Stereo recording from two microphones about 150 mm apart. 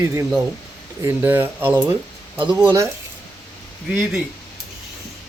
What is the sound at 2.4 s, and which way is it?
Speech, 35° right (ahead or behind).